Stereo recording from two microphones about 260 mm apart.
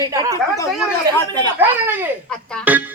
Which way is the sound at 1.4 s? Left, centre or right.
Centre.